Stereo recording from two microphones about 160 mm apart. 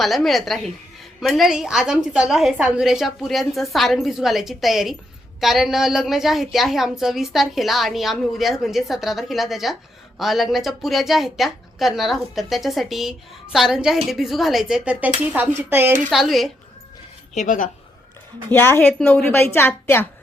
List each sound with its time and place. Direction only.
0.0 s a woman's voice: centre (ahead or behind)
17.3 s speech: 50° left (ahead or behind)
18.5 s a woman's voice: 15° left (ahead or behind)